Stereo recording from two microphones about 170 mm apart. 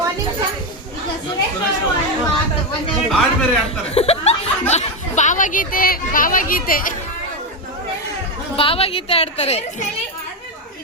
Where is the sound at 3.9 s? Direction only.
35° left (ahead or behind); by 7.0 s 55° left (ahead or behind).